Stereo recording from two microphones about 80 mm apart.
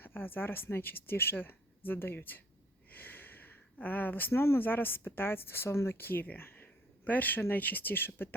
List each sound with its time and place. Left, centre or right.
0.0 s speech: left